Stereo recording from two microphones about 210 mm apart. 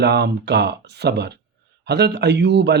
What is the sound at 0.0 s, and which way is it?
Speech, 50° right (ahead or behind).